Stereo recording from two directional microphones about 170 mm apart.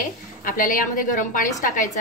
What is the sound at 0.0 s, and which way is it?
A woman's voice, 55° left (ahead or behind).